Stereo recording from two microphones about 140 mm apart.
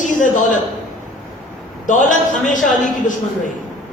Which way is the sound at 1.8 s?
65° left (ahead or behind).